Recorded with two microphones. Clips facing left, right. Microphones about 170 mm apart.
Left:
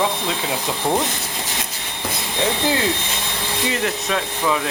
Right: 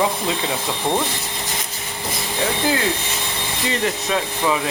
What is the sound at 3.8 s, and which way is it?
Speech, 5° right (ahead or behind).